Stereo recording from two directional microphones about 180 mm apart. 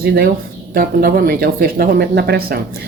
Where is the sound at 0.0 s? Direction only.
55° right (ahead or behind).